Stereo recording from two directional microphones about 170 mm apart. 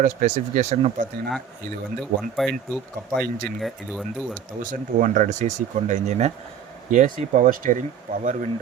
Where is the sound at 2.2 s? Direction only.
Centre (ahead or behind).